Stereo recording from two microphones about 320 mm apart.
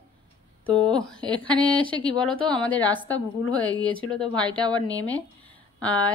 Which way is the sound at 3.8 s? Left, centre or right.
Centre.